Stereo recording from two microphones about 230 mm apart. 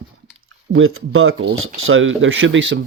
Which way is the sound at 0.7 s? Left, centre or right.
Right.